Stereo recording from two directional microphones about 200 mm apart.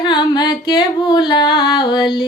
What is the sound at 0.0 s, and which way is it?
Speech, 20° left (ahead or behind).